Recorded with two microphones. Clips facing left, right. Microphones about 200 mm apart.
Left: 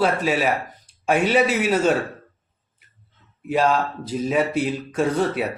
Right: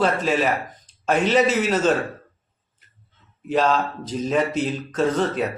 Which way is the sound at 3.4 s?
10° left (ahead or behind).